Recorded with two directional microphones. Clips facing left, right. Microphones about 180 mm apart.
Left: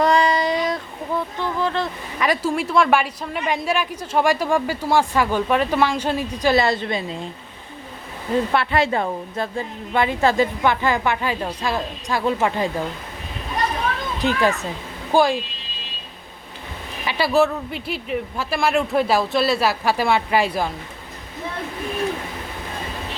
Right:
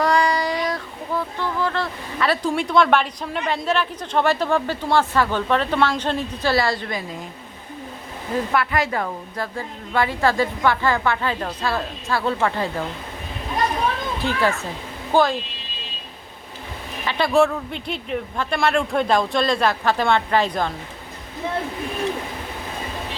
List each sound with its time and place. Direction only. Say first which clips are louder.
0.0 s a sound: left 2 dB; 20° left (ahead or behind)
2.5 s a woman's voice: right 1 dB; 5° left (ahead or behind); by 7.2 s 25° left (ahead or behind)
8.5 s a woman's voice: even; 30° left (ahead or behind)
14.2 s a woman's voice: left 3 dB; 15° left (ahead or behind)
17.1 s speech: even; 5° left (ahead or behind)